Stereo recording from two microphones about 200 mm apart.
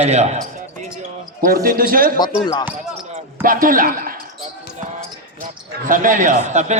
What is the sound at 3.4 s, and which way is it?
Speech, 45° right (ahead or behind).